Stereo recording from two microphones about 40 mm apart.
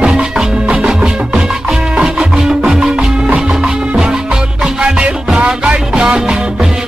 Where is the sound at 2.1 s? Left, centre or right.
Centre.